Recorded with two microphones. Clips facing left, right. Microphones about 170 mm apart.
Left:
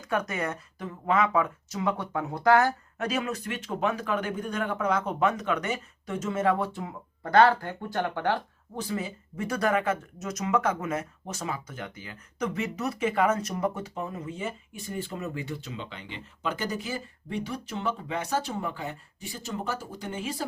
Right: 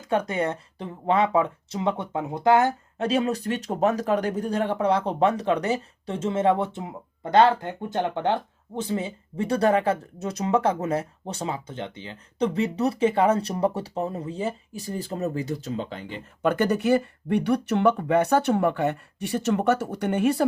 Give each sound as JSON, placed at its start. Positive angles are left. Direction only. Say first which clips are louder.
{"t": 0.1, "sound": "speech", "louder": "right 5 dB", "side_deg": -30}